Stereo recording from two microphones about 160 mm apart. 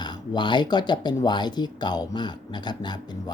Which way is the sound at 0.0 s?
30° left (ahead or behind).